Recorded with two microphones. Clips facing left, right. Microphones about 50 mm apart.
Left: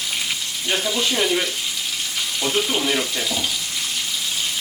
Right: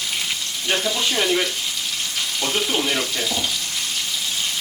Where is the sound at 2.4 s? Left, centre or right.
Centre.